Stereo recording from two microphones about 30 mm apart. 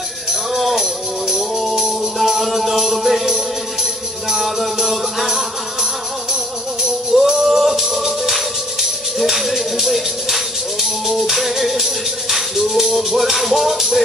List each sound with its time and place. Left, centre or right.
0.3 s music: centre